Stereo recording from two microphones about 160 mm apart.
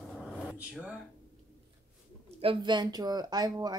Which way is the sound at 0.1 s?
Centre (ahead or behind).